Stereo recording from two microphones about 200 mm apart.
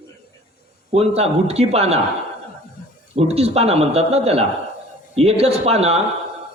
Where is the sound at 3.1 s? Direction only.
30° right (ahead or behind).